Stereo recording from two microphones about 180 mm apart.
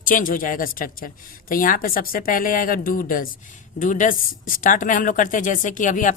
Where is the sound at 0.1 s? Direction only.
50° left (ahead or behind).